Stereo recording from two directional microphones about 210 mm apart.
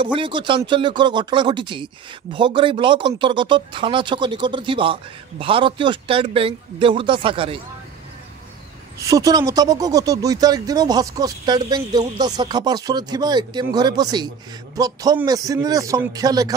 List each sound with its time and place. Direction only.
0.0 s speech: 25° right (ahead or behind)
9.0 s a man's voice: 15° right (ahead or behind)